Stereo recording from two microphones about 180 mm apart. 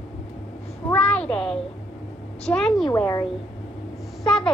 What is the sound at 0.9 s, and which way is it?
A woman's voice, 10° left (ahead or behind).